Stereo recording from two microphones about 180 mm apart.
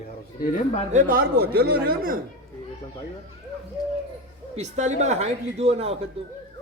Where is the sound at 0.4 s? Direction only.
45° left (ahead or behind).